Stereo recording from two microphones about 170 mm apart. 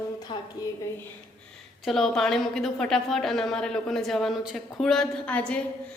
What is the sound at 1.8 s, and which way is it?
A woman's voice, centre (ahead or behind).